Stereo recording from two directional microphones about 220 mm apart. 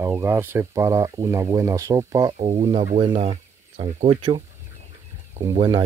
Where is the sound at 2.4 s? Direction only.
30° right (ahead or behind).